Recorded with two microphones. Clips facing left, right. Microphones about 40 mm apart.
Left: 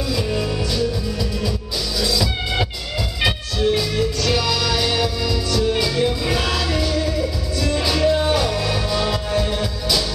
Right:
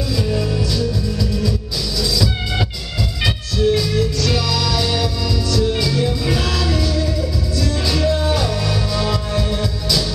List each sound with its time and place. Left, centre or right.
0.1 s music: centre
2.0 s music: centre
3.3 s music: centre